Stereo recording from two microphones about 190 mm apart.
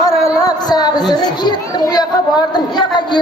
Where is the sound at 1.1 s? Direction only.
20° left (ahead or behind).